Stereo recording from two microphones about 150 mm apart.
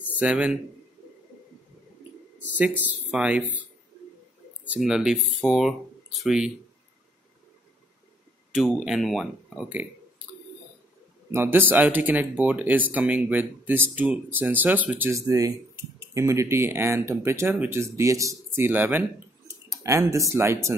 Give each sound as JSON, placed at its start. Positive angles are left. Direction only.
{"t": 0.2, "sound": "speech", "side_deg": -10}
{"t": 2.4, "sound": "a sound", "side_deg": -10}
{"t": 3.1, "sound": "speech", "side_deg": -5}
{"t": 4.7, "sound": "speech", "side_deg": -5}
{"t": 8.7, "sound": "speech", "side_deg": 0}
{"t": 11.2, "sound": "a man's voice", "side_deg": -15}